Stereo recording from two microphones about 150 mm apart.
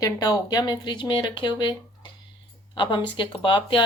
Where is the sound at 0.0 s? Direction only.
25° left (ahead or behind).